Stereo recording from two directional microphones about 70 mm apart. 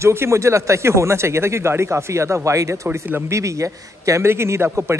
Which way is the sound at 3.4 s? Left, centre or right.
Right.